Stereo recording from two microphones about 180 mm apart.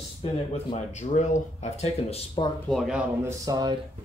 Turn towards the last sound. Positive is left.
turn(degrees=-20)  # may be behind; listen again after turning